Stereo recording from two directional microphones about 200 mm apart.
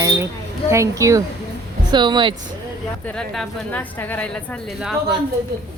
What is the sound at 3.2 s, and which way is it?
A woman's voice, 5° left (ahead or behind).